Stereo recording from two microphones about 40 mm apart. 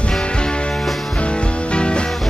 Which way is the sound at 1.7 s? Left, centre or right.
Left.